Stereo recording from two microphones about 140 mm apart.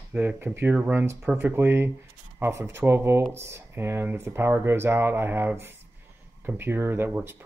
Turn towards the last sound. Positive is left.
turn(degrees=-15)  # may be behind; listen again after turning